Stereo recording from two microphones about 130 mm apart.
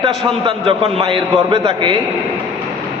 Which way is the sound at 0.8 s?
55° right (ahead or behind).